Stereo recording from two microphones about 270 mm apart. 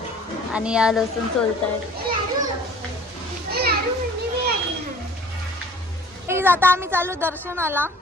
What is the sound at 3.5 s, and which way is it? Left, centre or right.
Children playing, right.